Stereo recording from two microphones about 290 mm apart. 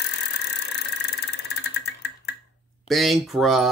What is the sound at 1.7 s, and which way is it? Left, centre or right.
Vehicle, left.